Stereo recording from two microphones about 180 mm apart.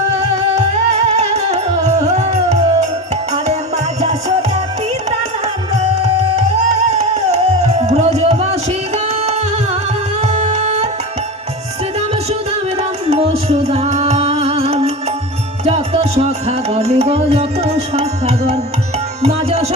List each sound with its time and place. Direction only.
0.2 s music: 35° right (ahead or behind)
5.7 s music: 35° right (ahead or behind)
10.2 s music: 35° right (ahead or behind)
13.1 s music: 35° right (ahead or behind)
19.2 s tabla: 35° right (ahead or behind)